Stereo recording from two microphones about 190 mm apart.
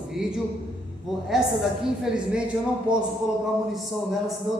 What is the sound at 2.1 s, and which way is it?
A man's voice, 5° right (ahead or behind).